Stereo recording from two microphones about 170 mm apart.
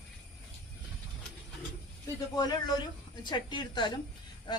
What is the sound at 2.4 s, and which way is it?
Speech, 25° left (ahead or behind).